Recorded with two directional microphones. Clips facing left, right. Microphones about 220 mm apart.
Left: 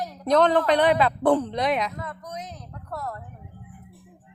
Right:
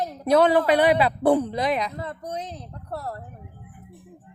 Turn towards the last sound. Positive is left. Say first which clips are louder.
# right 1 dB
turn(degrees=-30)  # may be behind; listen again after turning